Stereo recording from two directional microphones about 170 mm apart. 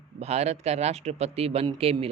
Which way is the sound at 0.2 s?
40° right (ahead or behind).